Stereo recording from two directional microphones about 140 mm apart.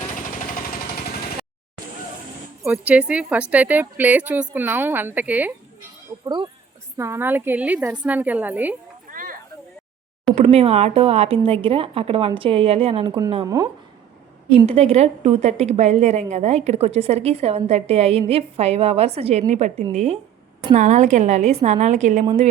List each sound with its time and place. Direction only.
0.1 s jackhammer: 70° left (ahead or behind); by 1.3 s 90° left
2.6 s a woman's voice: 10° right (ahead or behind)
6.2 s a woman's voice: 35° right (ahead or behind)
6.9 s a woman's voice: 20° right (ahead or behind)
9.0 s a sound: 80° right
10.3 s a woman's voice: 45° right (ahead or behind)
13.4 s a woman's voice: 25° right (ahead or behind)
14.7 s a woman's voice: 45° right (ahead or behind)